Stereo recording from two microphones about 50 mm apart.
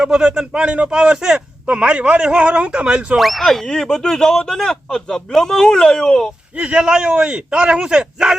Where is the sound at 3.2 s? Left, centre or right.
Centre.